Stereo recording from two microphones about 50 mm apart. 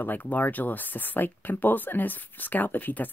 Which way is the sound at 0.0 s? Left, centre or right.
Left.